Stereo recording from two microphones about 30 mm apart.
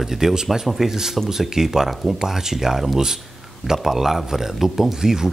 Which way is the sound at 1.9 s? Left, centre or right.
Centre.